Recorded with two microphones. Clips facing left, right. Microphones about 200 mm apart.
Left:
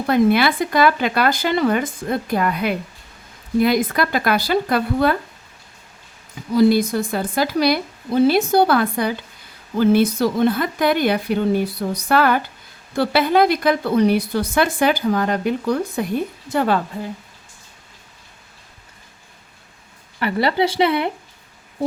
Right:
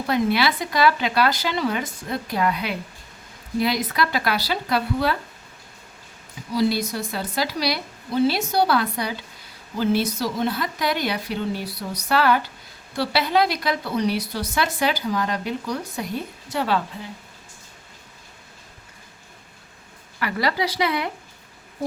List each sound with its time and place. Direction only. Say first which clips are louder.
0.1 s a woman's voice: left 6 dB; 50° left (ahead or behind)
6.5 s a woman's voice: left 7 dB; 50° left (ahead or behind)
20.1 s speech: left 5 dB; 30° left (ahead or behind)